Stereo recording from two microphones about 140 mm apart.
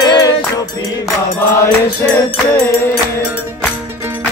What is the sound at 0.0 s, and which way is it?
Music, 30° left (ahead or behind).